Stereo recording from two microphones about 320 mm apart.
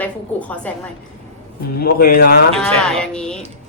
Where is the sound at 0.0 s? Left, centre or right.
Centre.